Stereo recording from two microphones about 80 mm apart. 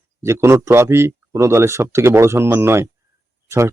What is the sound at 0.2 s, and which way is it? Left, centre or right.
Speech, right.